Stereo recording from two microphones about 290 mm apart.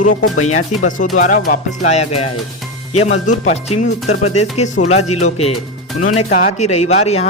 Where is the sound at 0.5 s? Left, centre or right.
Left.